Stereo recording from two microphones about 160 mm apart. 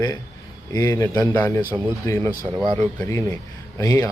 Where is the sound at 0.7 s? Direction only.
20° left (ahead or behind).